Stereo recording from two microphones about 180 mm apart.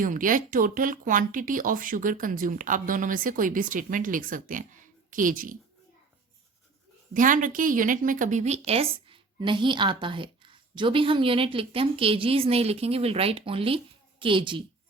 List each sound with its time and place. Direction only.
0.0 s speech: 50° right (ahead or behind)
7.1 s a woman's voice: 45° right (ahead or behind); by 14.6 s 30° right (ahead or behind)